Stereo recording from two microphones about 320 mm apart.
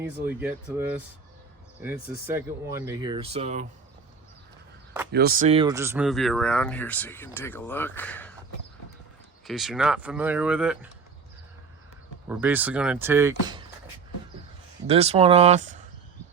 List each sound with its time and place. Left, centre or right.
0.3 s speech: centre
5.1 s speech: right; by 8.3 s centre
9.5 s speech: centre
12.3 s speech: centre
14.8 s speech: centre